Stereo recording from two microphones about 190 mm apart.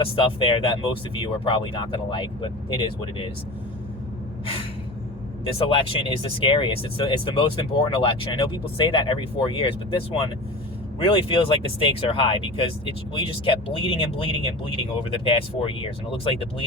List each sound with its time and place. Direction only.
0.0 s speech: 25° left (ahead or behind)
5.5 s speech: 30° left (ahead or behind)